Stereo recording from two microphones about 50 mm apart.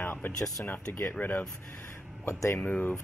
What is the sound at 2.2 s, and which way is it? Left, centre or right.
Speech, left.